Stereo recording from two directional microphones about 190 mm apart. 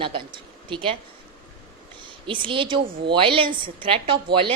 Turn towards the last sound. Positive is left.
turn(degrees=-25)  # may be behind; listen again after turning